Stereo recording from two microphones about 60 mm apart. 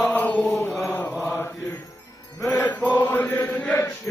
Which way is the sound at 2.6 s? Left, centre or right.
Left.